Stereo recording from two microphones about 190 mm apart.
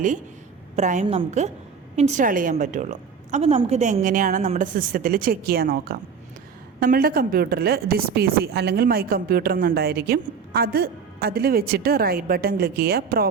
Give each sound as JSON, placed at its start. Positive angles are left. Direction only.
{"t": 0.8, "sound": "a woman's voice", "side_deg": -40}
{"t": 1.0, "sound": "a woman's voice", "side_deg": -25}
{"t": 2.0, "sound": "a woman's voice", "side_deg": -40}